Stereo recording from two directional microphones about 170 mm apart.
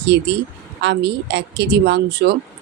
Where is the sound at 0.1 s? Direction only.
90° right; by 2.3 s 70° right (ahead or behind).